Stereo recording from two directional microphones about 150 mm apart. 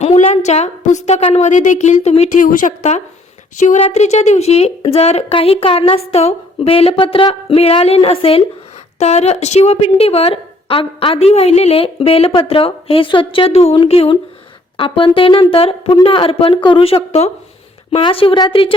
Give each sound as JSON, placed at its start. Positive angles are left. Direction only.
{"t": 0.0, "sound": "a woman's voice", "side_deg": 45}
{"t": 3.8, "sound": "a woman's voice", "side_deg": 45}